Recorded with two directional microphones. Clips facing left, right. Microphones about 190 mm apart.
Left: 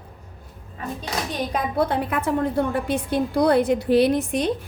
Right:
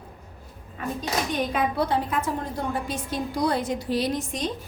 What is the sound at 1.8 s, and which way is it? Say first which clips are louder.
A woman's voice: left 2 dB; 60° left (ahead or behind).